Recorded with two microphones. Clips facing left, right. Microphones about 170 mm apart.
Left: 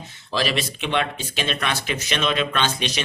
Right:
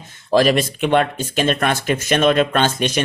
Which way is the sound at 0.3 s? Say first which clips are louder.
Right 10 dB; 50° right (ahead or behind).